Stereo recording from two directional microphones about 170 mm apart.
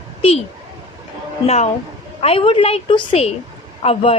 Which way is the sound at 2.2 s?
35° left (ahead or behind).